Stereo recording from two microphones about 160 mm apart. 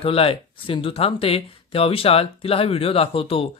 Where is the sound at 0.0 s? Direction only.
35° left (ahead or behind).